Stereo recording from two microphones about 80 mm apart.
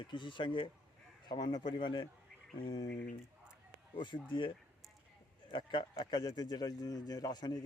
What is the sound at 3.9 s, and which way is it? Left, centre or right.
Speech, left.